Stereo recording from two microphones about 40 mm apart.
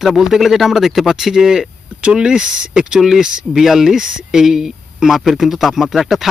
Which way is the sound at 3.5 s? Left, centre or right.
Centre.